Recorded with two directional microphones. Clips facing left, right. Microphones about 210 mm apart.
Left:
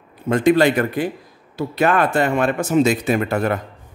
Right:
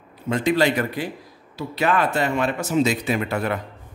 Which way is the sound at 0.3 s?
50° left (ahead or behind).